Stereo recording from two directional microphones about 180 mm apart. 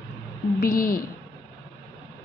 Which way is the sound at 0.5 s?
55° left (ahead or behind).